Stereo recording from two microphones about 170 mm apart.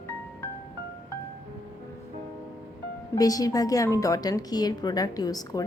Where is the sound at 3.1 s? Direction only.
20° left (ahead or behind).